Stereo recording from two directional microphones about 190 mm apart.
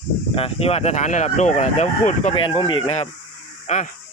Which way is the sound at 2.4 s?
25° left (ahead or behind).